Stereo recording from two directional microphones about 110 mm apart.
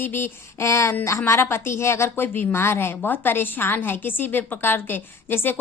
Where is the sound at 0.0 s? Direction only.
20° left (ahead or behind).